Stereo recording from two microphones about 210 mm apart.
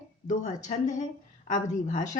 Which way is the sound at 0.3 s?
35° left (ahead or behind).